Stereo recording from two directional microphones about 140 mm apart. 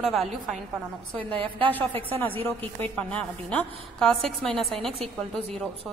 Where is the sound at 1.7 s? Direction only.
15° left (ahead or behind).